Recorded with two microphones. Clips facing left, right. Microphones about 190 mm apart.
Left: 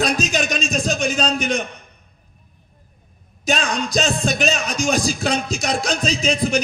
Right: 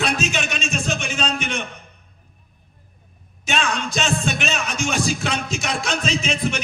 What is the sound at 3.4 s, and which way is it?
Music, 35° left (ahead or behind).